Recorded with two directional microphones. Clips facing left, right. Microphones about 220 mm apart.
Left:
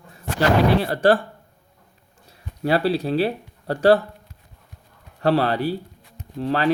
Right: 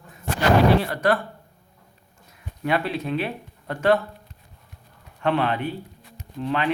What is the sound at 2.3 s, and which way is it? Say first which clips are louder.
Speech: left 3 dB; 35° left (ahead or behind).